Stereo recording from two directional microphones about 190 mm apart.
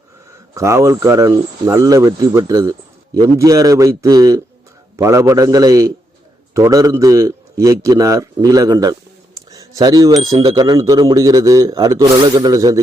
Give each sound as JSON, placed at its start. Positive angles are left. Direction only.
{"t": 0.5, "sound": "a man's voice", "side_deg": -15}
{"t": 9.5, "sound": "a sound", "side_deg": -20}
{"t": 10.4, "sound": "a man's voice", "side_deg": -20}